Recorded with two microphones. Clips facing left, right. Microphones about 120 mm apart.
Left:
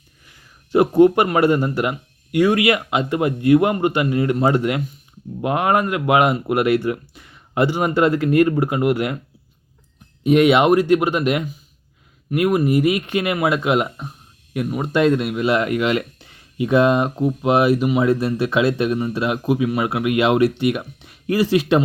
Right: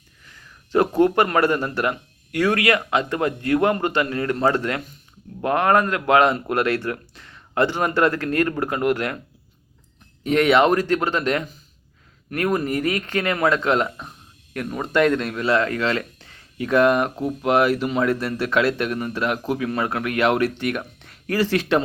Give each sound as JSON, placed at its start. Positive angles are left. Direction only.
{"t": 0.3, "sound": "speech", "side_deg": 15}
{"t": 10.2, "sound": "speech", "side_deg": 15}